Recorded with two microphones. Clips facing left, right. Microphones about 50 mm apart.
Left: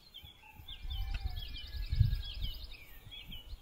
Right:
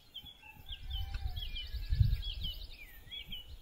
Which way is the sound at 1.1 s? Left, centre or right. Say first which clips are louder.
Left 1 dB; left.